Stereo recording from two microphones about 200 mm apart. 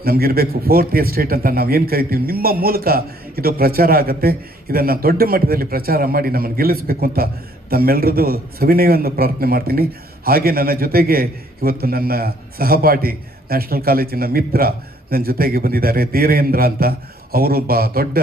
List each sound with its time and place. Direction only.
0.0 s a man's voice: 50° right (ahead or behind)